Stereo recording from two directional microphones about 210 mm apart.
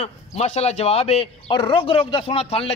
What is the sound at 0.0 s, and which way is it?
Speech, 30° left (ahead or behind).